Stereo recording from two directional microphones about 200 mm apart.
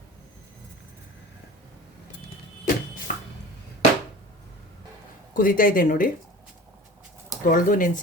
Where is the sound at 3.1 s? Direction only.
40° left (ahead or behind).